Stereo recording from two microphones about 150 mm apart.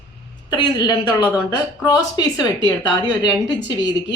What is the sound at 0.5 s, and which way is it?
A woman's voice, 30° left (ahead or behind).